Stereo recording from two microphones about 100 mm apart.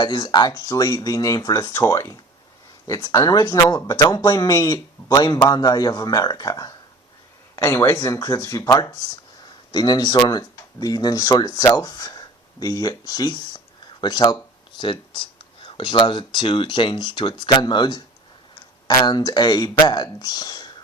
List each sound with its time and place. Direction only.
0.0 s a man's voice: 50° left (ahead or behind)
7.5 s a man's voice: 25° left (ahead or behind)
9.4 s speech: 45° left (ahead or behind)